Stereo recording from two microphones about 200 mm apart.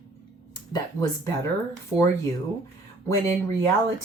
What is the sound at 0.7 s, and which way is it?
Speech, 15° left (ahead or behind).